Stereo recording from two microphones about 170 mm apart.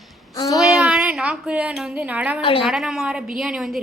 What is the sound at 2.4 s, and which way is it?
Speech, 30° left (ahead or behind).